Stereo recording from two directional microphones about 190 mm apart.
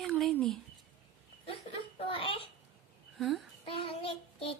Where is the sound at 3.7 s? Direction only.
30° left (ahead or behind).